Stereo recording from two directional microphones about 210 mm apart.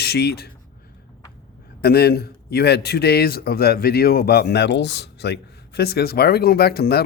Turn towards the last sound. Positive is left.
turn(degrees=45)  # may be behind; listen again after turning